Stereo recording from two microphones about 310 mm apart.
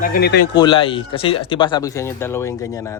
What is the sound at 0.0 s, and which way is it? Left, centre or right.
Speech, left.